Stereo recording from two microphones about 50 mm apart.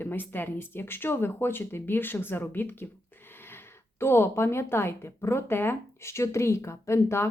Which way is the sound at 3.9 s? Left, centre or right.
Left.